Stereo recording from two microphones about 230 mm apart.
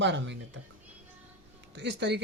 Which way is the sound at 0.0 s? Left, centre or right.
Right.